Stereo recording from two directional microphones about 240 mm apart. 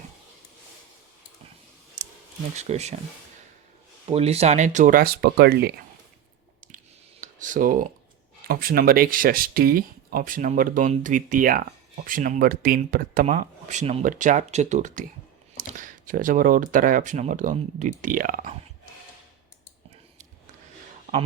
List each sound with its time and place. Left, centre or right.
2.6 s speech: right
4.0 s speech: right
7.2 s speech: right